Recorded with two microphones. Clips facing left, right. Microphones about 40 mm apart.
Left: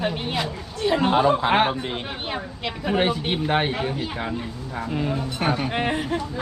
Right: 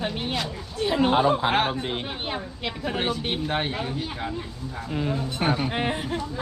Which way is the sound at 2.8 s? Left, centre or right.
Centre.